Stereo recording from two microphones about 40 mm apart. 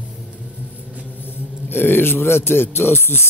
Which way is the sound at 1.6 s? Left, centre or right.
Left.